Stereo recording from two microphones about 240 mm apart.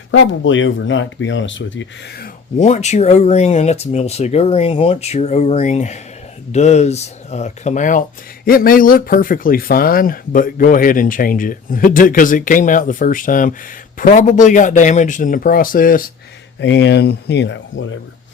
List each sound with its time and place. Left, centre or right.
0.1 s speech: left
2.6 s speech: left
16.6 s speech: left